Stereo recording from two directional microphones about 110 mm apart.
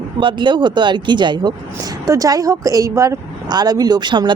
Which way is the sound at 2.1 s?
30° right (ahead or behind).